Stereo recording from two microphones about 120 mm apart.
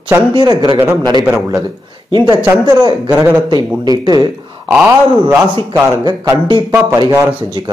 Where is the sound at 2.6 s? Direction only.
35° right (ahead or behind).